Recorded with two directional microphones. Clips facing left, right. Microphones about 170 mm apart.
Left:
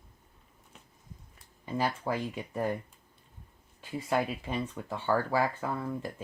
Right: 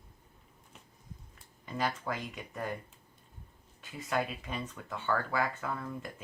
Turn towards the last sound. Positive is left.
turn(degrees=30)  # may be behind; listen again after turning